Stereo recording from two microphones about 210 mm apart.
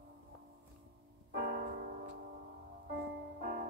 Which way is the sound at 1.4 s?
50° right (ahead or behind).